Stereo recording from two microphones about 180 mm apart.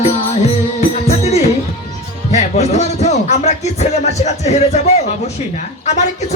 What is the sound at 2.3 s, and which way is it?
Speech, 40° left (ahead or behind).